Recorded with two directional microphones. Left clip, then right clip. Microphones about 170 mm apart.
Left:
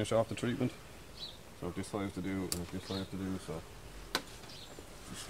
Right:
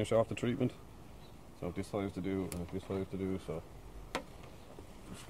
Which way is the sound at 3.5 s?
Centre (ahead or behind).